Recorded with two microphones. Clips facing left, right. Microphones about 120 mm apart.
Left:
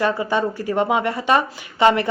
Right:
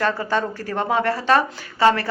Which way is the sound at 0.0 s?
15° left (ahead or behind).